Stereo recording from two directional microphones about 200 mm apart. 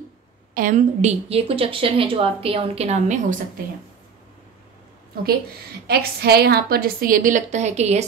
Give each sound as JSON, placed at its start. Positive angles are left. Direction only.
{"t": 0.6, "sound": "a woman's voice", "side_deg": -40}
{"t": 5.9, "sound": "a woman's voice", "side_deg": -50}